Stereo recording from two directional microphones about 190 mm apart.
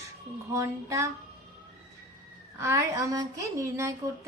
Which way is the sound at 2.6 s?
15° right (ahead or behind).